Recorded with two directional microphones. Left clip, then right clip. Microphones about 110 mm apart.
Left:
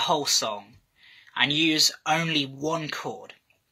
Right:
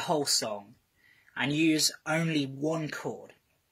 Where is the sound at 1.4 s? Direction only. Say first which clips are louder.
Left 5 dB; 45° right (ahead or behind).